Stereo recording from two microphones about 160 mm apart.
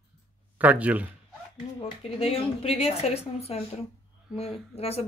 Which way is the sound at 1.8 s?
35° left (ahead or behind).